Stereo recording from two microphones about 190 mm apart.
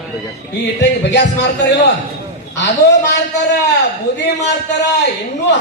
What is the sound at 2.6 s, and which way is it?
Speech, 65° left (ahead or behind).